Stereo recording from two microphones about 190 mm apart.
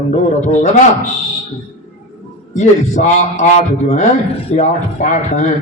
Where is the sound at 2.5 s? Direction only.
40° left (ahead or behind).